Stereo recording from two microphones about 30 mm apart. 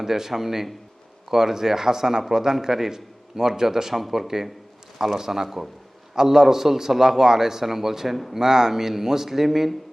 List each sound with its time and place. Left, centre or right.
0.0 s a man's voice: centre
8.4 s a man's voice: centre